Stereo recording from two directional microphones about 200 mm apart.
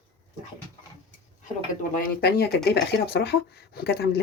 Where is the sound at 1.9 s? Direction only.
50° left (ahead or behind).